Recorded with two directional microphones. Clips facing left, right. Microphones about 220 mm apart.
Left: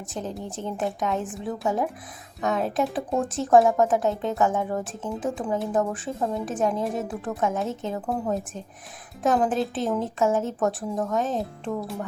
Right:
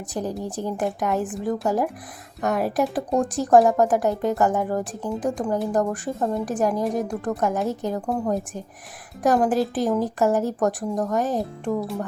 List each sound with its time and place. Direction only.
0.1 s speech: 10° right (ahead or behind)